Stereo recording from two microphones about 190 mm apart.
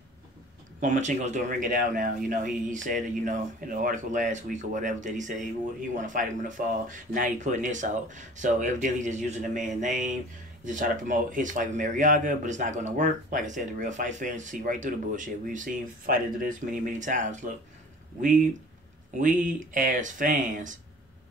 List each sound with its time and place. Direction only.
0.7 s speech: 40° right (ahead or behind)
19.1 s speech: 45° right (ahead or behind)